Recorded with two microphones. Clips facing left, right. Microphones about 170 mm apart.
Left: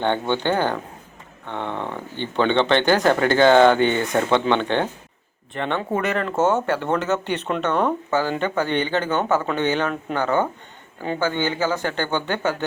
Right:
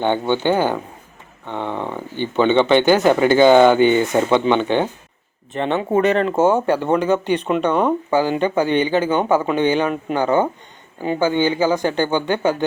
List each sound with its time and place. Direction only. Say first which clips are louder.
0.0 s speech: right 3 dB; 5° right (ahead or behind)
5.5 s speech: right 6 dB; 20° right (ahead or behind)
6.3 s speech: right 4 dB; 10° right (ahead or behind)